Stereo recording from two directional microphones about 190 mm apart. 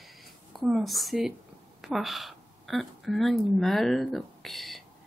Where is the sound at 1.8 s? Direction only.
Centre (ahead or behind).